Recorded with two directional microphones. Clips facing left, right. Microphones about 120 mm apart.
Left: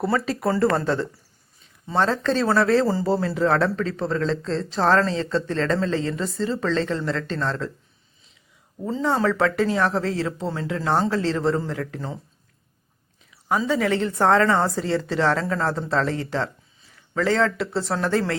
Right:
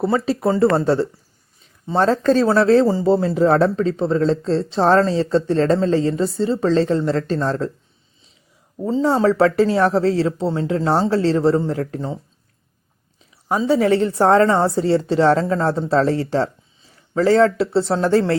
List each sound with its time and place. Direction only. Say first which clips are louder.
0.0 s speech: right 4 dB; 30° right (ahead or behind)
2.5 s speech: right 3 dB; 25° right (ahead or behind)
8.9 s speech: right 6 dB; 30° right (ahead or behind)
13.3 s speech: right 5 dB; 30° right (ahead or behind)